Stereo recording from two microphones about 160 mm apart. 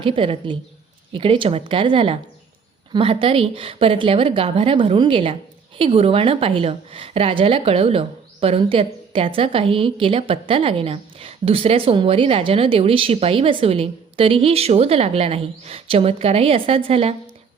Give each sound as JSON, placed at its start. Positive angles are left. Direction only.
{"t": 0.0, "sound": "a woman's voice", "side_deg": -35}